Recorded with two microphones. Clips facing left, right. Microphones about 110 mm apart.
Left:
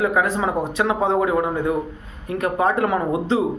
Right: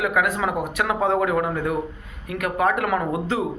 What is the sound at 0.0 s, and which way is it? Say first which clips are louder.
Speech: left 2 dB; 30° left (ahead or behind).